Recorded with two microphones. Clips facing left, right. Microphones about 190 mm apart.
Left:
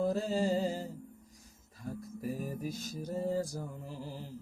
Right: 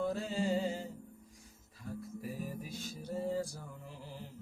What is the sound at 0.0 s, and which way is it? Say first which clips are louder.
Music: left 4 dB; 40° left (ahead or behind).